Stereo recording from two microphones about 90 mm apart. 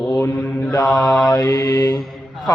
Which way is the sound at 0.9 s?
45° left (ahead or behind).